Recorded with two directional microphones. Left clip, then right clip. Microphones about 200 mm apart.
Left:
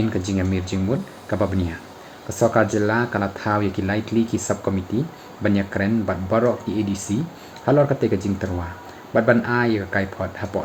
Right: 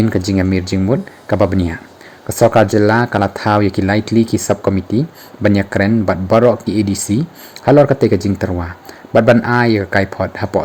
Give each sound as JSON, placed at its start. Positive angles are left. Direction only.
{"t": 0.1, "sound": "speech", "side_deg": -45}